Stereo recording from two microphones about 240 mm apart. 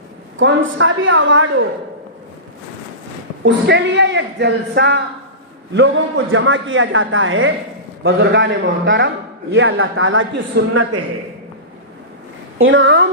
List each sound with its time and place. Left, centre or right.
0.3 s a man's voice: right
3.4 s a man's voice: right
10.5 s a man's voice: right
12.5 s a man's voice: right